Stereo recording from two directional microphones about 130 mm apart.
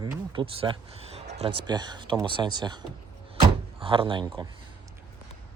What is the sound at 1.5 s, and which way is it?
Speech, 35° right (ahead or behind).